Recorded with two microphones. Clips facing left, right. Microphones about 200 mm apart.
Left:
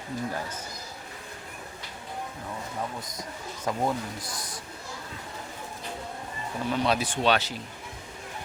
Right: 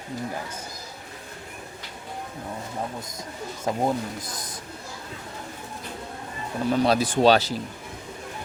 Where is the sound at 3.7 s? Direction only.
25° right (ahead or behind).